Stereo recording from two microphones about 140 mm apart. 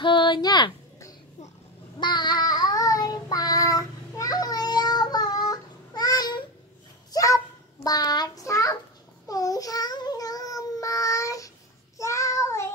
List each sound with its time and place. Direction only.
0.0 s speech: 35° left (ahead or behind)
2.0 s child singing: 30° left (ahead or behind)
7.1 s a sound: 25° left (ahead or behind)
7.8 s child singing: 25° left (ahead or behind)